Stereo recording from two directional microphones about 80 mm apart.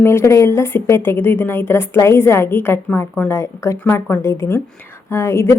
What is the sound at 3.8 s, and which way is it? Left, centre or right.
Speech, left.